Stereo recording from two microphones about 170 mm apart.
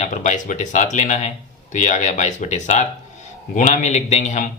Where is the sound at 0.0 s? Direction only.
45° left (ahead or behind).